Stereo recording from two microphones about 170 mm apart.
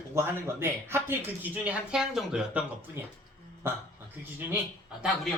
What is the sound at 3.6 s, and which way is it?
Speech, 15° right (ahead or behind).